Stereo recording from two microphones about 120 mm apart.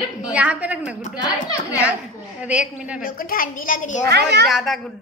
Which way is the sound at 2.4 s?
10° right (ahead or behind).